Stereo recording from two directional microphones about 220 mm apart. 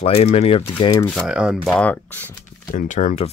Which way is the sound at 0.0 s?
30° left (ahead or behind).